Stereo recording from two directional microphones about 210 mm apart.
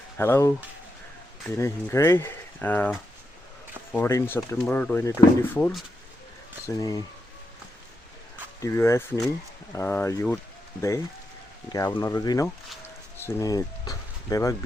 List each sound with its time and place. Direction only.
0.2 s speech: 10° left (ahead or behind)
8.6 s speech: 10° left (ahead or behind)